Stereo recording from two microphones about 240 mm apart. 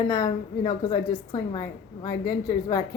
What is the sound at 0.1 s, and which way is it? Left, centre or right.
A woman's voice, centre.